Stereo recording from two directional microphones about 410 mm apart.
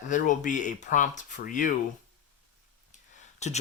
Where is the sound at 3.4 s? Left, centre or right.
Centre.